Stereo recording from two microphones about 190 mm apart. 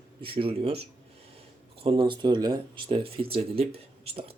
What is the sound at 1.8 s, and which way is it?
Speech, 25° right (ahead or behind).